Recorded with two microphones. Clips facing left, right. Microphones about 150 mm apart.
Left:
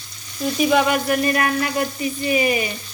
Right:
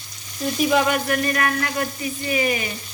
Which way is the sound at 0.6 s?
5° left (ahead or behind).